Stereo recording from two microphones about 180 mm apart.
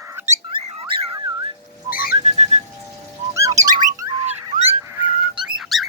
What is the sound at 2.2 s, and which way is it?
Whistling, 35° right (ahead or behind).